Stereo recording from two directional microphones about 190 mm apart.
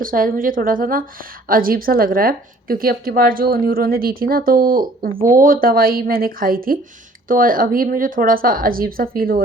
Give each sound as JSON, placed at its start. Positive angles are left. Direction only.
{"t": 0.0, "sound": "a woman's voice", "side_deg": -50}